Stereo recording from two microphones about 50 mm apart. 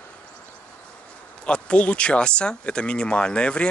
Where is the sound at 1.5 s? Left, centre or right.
Left.